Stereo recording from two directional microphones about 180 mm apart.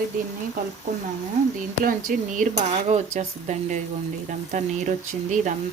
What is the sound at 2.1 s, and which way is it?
Speech, 45° right (ahead or behind).